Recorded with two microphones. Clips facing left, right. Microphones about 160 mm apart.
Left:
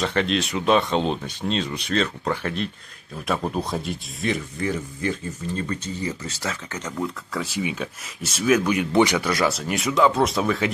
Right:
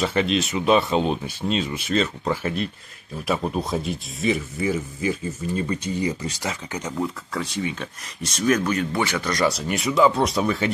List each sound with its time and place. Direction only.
0.0 s speech: 5° right (ahead or behind)
7.3 s speech: 5° left (ahead or behind)
9.3 s speech: centre (ahead or behind)